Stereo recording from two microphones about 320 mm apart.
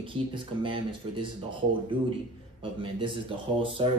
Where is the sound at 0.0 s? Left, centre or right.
Centre.